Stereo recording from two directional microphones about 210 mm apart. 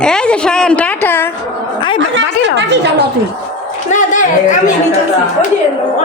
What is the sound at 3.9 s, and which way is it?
Speech, 35° left (ahead or behind).